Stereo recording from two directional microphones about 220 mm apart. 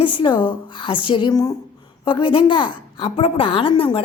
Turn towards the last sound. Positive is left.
turn(degrees=25)  # may be behind; listen again after turning